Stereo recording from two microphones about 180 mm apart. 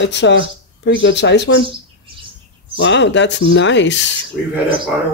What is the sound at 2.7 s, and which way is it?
Speech, 80° left.